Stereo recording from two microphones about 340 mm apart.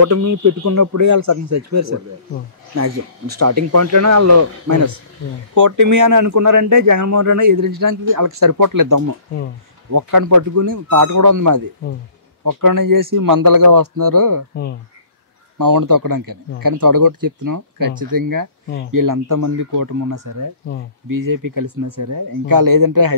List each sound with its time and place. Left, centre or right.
0.0 s speech: right
15.5 s speech: right